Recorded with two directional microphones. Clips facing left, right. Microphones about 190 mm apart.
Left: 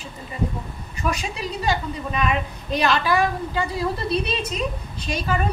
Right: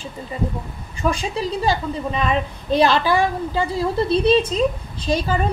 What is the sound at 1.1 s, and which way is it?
A woman's voice, 30° right (ahead or behind).